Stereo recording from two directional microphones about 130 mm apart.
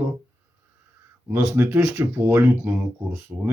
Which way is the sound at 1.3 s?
15° right (ahead or behind).